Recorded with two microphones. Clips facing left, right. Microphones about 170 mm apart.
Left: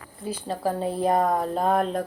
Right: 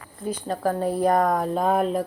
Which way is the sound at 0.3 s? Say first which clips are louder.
Right 2 dB; 5° left (ahead or behind).